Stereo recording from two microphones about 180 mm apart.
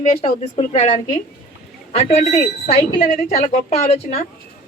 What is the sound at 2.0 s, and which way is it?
Speech, 35° left (ahead or behind).